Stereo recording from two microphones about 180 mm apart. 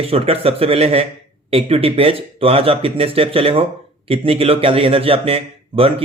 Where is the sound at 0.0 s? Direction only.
35° right (ahead or behind).